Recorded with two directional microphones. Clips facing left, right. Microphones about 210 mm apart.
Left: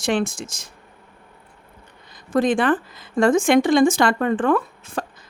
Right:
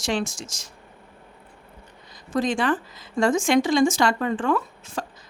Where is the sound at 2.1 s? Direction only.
55° left (ahead or behind).